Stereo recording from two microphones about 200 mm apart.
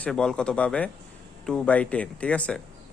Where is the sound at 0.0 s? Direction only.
5° left (ahead or behind).